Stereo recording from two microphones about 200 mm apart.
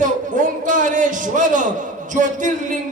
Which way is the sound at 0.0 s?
40° right (ahead or behind).